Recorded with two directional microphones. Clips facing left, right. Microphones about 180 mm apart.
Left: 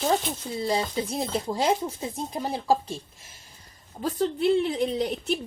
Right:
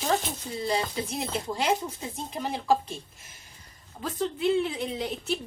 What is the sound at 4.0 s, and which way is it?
A woman's voice, 40° left (ahead or behind).